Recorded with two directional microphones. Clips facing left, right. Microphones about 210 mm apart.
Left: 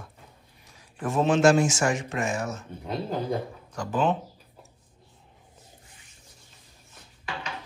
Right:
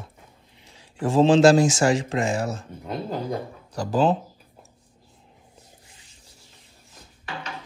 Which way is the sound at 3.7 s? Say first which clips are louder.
Right 4 dB; 35° right (ahead or behind).